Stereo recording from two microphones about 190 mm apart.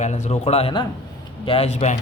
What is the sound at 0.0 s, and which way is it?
Speech, 35° left (ahead or behind).